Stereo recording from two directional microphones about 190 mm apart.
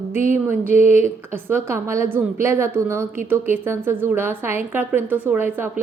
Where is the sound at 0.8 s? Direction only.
35° left (ahead or behind).